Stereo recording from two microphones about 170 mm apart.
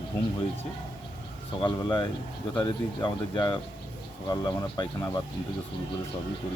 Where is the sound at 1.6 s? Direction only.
25° left (ahead or behind).